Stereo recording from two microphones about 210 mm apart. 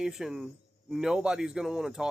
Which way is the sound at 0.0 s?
Centre (ahead or behind).